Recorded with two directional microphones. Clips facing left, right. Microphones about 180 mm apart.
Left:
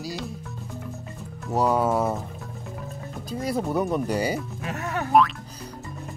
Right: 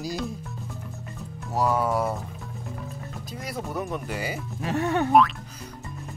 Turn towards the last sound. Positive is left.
turn(degrees=0)  # may be behind; listen again after turning